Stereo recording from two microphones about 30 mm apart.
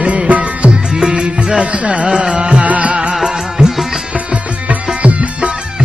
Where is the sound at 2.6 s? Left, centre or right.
Right.